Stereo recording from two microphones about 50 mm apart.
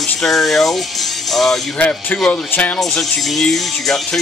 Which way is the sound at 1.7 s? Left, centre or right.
Left.